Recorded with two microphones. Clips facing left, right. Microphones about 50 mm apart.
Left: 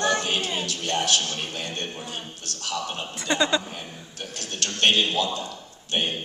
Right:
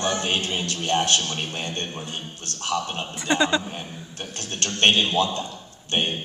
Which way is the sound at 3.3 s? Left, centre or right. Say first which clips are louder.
Right 2 dB; centre.